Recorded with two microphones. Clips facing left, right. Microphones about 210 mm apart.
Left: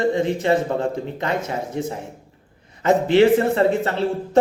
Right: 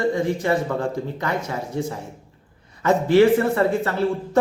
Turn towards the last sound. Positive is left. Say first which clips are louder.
# left 1 dB
turn(degrees=25)  # may be behind; listen again after turning